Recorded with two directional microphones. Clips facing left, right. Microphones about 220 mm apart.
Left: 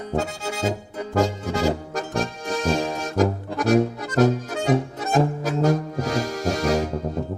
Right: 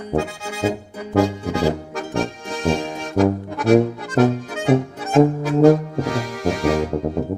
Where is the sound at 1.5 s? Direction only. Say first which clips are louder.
Right 2 dB; 40° left (ahead or behind).